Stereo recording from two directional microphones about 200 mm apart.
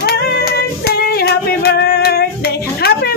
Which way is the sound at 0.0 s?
50° left (ahead or behind).